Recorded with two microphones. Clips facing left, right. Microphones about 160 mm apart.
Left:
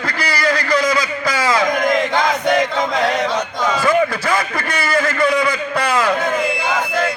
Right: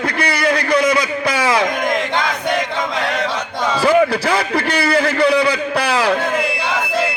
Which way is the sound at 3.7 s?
30° right (ahead or behind).